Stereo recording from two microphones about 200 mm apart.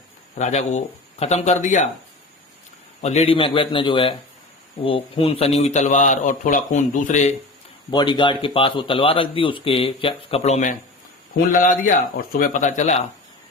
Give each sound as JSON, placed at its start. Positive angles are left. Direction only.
{"t": 0.3, "sound": "a man's voice", "side_deg": 35}
{"t": 3.0, "sound": "a man's voice", "side_deg": 35}
{"t": 7.9, "sound": "speech", "side_deg": 25}